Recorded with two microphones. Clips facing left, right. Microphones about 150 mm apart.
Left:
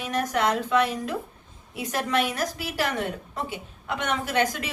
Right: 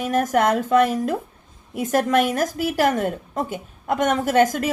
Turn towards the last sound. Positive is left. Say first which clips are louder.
# right 8 dB
turn(degrees=-45)  # may be behind; listen again after turning